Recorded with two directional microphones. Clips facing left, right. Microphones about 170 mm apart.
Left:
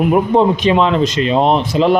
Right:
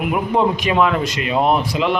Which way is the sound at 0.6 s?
25° left (ahead or behind).